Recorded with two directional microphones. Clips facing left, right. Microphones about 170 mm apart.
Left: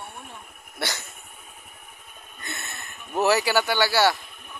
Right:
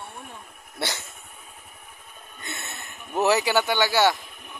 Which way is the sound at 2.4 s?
25° right (ahead or behind).